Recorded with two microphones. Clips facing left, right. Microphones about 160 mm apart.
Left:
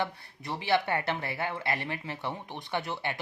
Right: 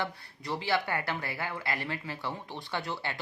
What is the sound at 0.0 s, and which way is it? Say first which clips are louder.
Speech: left 2 dB; 20° left (ahead or behind).